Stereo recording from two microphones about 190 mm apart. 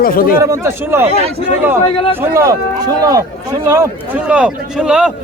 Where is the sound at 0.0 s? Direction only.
50° left (ahead or behind).